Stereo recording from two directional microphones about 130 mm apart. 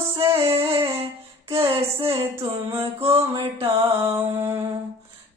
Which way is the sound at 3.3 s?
45° right (ahead or behind).